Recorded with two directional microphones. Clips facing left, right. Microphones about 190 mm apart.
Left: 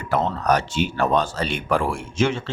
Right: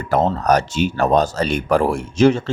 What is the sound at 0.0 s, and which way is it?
Speech, 40° right (ahead or behind).